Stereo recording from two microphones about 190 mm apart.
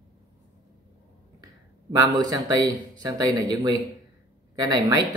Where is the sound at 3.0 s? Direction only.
20° right (ahead or behind).